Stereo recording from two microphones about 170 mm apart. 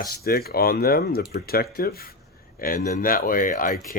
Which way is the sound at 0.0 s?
65° left (ahead or behind).